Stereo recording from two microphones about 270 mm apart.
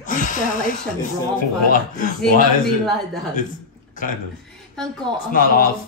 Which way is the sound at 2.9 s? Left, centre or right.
Centre.